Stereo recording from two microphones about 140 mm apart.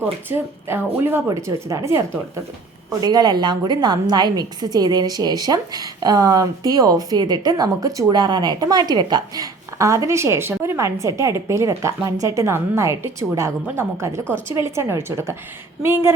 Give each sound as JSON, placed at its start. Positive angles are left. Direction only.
{"t": 0.0, "sound": "a woman's voice", "side_deg": -15}